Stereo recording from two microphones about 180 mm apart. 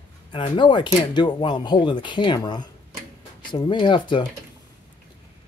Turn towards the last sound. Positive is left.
turn(degrees=25)  # may be behind; listen again after turning